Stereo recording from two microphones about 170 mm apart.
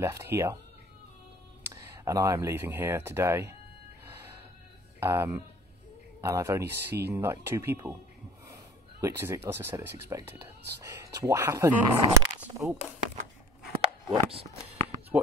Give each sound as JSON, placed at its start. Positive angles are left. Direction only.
{"t": 0.0, "sound": "speech", "side_deg": -15}
{"t": 1.6, "sound": "speech", "side_deg": -20}
{"t": 5.0, "sound": "speech", "side_deg": -15}
{"t": 9.0, "sound": "speech", "side_deg": -15}
{"t": 14.0, "sound": "a sound", "side_deg": -30}